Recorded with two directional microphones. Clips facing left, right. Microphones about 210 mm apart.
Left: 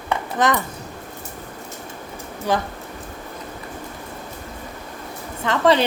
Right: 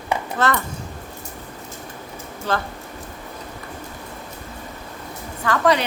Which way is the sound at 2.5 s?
15° left (ahead or behind).